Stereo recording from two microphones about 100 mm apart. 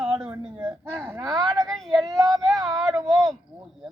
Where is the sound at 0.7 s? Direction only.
25° right (ahead or behind).